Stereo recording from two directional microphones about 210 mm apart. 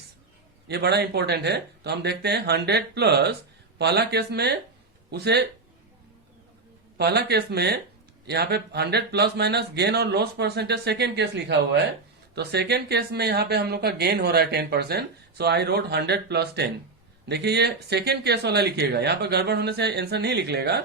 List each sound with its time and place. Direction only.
0.7 s speech: 50° right (ahead or behind)
6.9 s speech: 50° right (ahead or behind)